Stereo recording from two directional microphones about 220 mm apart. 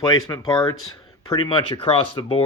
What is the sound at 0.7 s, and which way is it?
Speech, 70° left (ahead or behind).